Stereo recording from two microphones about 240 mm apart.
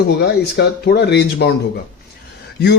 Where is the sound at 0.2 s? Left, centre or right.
Left.